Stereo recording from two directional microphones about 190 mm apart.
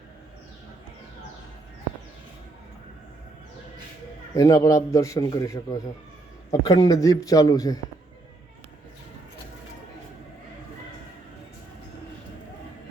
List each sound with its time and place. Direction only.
4.4 s a man's voice: 15° left (ahead or behind)